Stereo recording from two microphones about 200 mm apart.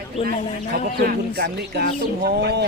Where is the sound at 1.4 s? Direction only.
55° right (ahead or behind).